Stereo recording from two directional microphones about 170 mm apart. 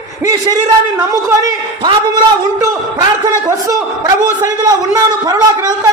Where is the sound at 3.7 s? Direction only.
20° right (ahead or behind).